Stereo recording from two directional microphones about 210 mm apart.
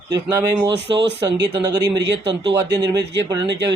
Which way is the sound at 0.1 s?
15° right (ahead or behind).